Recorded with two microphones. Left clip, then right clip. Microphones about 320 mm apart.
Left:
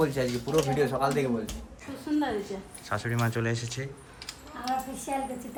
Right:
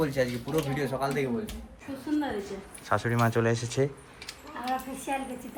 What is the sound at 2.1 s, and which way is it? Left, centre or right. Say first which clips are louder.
Speech: left 2 dB; centre.